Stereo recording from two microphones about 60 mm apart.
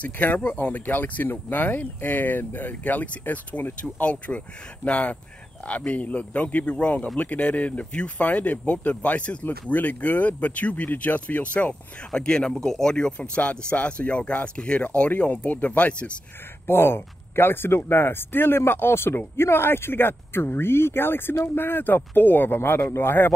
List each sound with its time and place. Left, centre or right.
0.0 s speech: left
12.1 s speech: centre
16.6 s speech: left